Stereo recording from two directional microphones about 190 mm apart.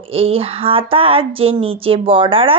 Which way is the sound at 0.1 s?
30° right (ahead or behind).